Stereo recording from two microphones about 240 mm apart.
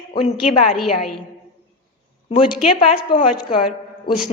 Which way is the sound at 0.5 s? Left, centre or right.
Left.